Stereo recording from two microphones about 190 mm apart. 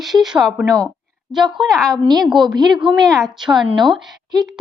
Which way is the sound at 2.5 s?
20° right (ahead or behind).